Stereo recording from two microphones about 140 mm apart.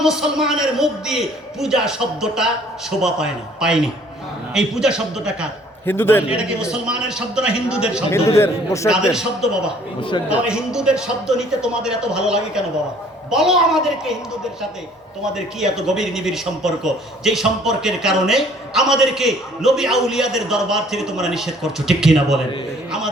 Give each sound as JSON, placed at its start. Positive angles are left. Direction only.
{"t": 0.0, "sound": "a man's voice", "side_deg": -5}
{"t": 5.8, "sound": "a man's voice", "side_deg": 15}
{"t": 6.3, "sound": "a man's voice", "side_deg": -5}
{"t": 8.4, "sound": "a man's voice", "side_deg": 20}
{"t": 8.9, "sound": "a man's voice", "side_deg": -5}
{"t": 10.0, "sound": "a man's voice", "side_deg": 35}
{"t": 10.2, "sound": "a man's voice", "side_deg": -5}
{"t": 15.6, "sound": "a man's voice", "side_deg": -5}